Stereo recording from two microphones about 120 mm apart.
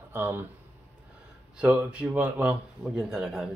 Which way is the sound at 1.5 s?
10° right (ahead or behind).